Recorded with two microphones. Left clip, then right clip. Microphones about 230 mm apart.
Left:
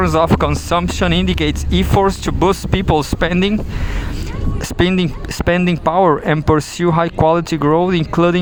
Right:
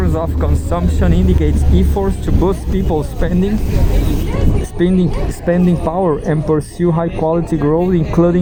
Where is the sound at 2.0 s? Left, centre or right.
Left.